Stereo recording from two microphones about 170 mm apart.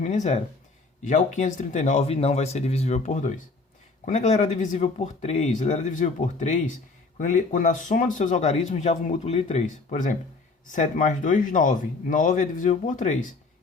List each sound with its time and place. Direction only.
0.0 s speech: 45° left (ahead or behind)